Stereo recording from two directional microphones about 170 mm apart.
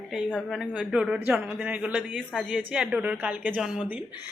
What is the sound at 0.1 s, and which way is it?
A man's voice, 5° left (ahead or behind).